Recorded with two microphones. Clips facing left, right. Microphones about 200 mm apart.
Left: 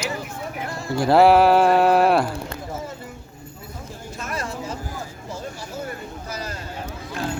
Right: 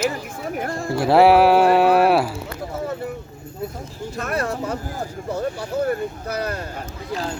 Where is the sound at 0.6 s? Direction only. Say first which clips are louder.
Right 7 dB; 50° right (ahead or behind).